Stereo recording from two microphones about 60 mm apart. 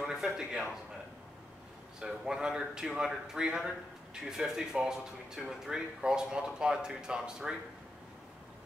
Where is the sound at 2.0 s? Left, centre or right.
Centre.